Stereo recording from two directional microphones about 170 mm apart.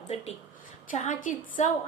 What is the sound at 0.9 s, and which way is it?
Speech, 45° left (ahead or behind).